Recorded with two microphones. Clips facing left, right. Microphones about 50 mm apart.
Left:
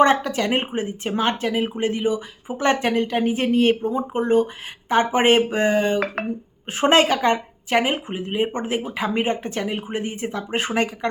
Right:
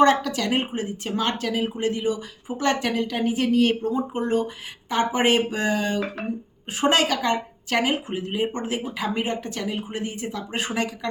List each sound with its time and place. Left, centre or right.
0.0 s speech: left
7.7 s speech: left